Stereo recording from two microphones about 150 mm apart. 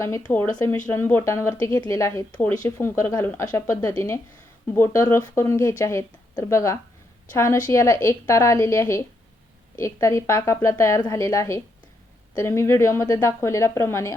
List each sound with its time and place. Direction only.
0.2 s speech: 15° left (ahead or behind)